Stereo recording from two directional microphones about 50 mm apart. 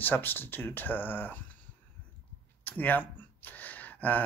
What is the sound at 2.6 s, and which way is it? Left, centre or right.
Speech, left.